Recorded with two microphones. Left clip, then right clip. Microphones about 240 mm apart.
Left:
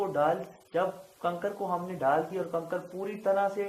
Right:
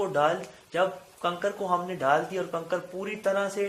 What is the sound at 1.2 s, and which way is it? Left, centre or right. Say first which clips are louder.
Speech: right 3 dB; right.